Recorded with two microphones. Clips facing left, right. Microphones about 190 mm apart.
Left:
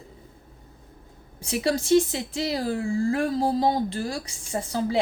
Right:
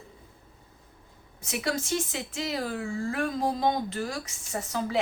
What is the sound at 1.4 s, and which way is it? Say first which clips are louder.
A woman's voice: left 5 dB; 30° left (ahead or behind).